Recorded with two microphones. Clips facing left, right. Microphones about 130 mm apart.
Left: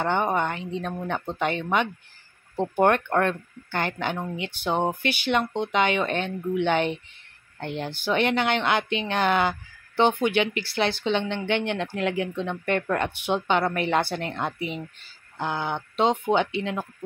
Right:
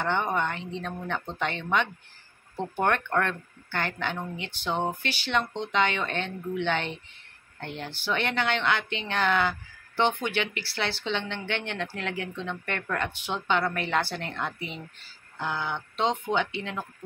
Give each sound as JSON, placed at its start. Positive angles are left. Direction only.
{"t": 0.0, "sound": "speech", "side_deg": 15}